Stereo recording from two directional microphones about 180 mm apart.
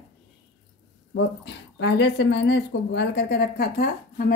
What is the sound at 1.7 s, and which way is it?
Speech, 90° left.